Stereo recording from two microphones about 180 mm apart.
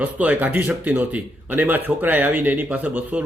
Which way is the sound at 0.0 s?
10° right (ahead or behind).